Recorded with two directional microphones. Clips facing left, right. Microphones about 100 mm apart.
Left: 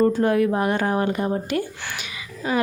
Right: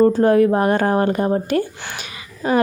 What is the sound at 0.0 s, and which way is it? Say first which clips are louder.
A woman's voice: right 5 dB; 35° right (ahead or behind).